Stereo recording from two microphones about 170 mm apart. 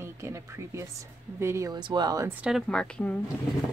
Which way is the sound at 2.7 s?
5° left (ahead or behind).